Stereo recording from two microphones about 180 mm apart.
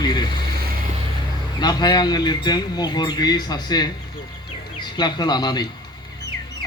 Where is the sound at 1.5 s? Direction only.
25° left (ahead or behind).